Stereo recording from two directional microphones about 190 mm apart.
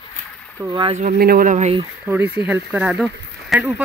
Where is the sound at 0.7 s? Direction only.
25° right (ahead or behind).